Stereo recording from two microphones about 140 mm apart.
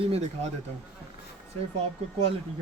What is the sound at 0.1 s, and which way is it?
Speech, 50° right (ahead or behind).